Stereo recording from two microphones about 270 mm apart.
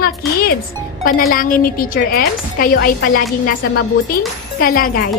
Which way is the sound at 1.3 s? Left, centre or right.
Left.